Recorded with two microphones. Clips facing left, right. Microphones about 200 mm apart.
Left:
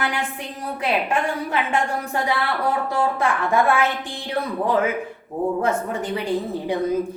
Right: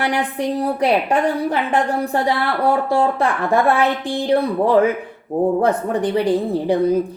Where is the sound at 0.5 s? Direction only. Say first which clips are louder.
Right 6 dB; 35° right (ahead or behind).